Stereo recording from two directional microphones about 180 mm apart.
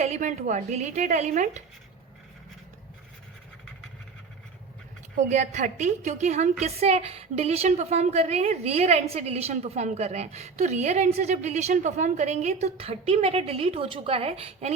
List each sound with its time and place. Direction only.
0.0 s a woman's voice: 40° right (ahead or behind)
5.1 s a woman's voice: 40° right (ahead or behind)